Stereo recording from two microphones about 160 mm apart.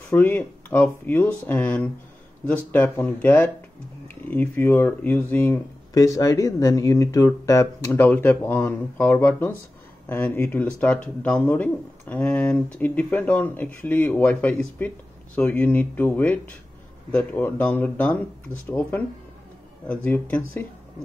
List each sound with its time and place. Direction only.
0.1 s speech: 10° left (ahead or behind)